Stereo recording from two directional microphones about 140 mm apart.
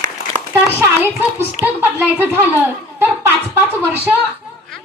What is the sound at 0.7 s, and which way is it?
A woman's voice, 15° right (ahead or behind).